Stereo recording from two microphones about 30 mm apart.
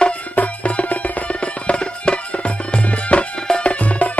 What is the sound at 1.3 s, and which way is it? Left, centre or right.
Music, left.